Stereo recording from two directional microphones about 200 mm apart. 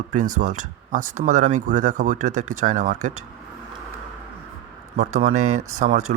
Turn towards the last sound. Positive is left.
turn(degrees=-35)  # may be behind; listen again after turning